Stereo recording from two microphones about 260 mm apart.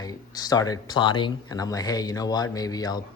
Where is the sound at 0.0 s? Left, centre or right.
Centre.